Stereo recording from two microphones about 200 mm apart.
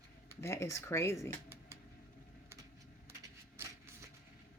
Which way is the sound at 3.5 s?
10° right (ahead or behind).